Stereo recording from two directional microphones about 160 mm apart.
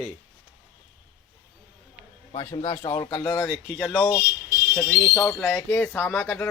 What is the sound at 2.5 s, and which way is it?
Speech, 30° left (ahead or behind).